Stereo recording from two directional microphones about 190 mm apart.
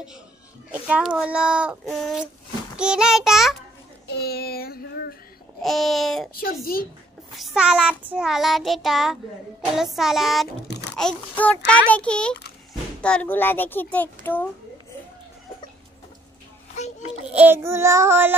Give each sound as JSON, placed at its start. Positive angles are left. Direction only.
{"t": 0.7, "sound": "speech", "side_deg": -5}
{"t": 4.1, "sound": "child singing", "side_deg": 55}
{"t": 5.6, "sound": "speech", "side_deg": 0}
{"t": 6.3, "sound": "a child's voice", "side_deg": 50}
{"t": 7.3, "sound": "a child's voice", "side_deg": -5}
{"t": 17.3, "sound": "child singing", "side_deg": -10}